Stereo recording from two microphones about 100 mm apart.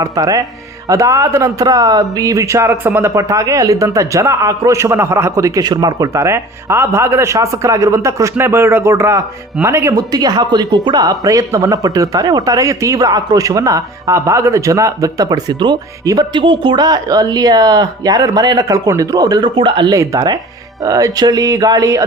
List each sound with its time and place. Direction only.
0.0 s speech: 35° right (ahead or behind)
6.1 s speech: 30° right (ahead or behind)
9.9 s speech: 40° right (ahead or behind)
16.4 s speech: 55° right (ahead or behind); by 19.5 s 40° right (ahead or behind)
19.5 s speech: 55° right (ahead or behind)
19.9 s speech: 35° right (ahead or behind)